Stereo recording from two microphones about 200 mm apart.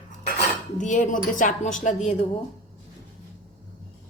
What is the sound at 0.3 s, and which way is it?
Speech, 35° left (ahead or behind).